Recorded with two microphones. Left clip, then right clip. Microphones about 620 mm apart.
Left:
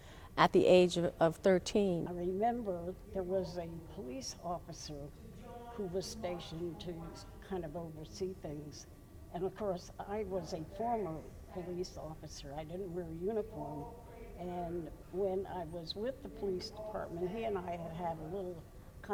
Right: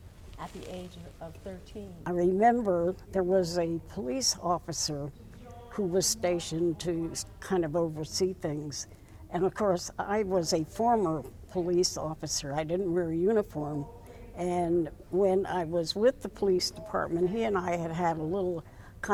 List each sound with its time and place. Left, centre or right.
0.3 s a woman's voice: left
2.0 s speech: right
19.0 s a sound: right